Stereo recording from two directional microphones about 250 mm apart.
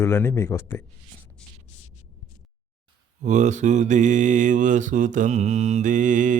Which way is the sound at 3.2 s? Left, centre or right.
Right.